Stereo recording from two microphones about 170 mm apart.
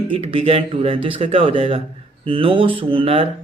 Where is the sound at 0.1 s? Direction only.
35° right (ahead or behind).